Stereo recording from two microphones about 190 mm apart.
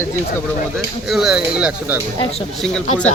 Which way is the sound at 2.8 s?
40° left (ahead or behind).